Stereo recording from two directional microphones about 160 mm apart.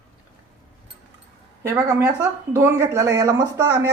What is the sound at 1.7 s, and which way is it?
Speech, 15° right (ahead or behind).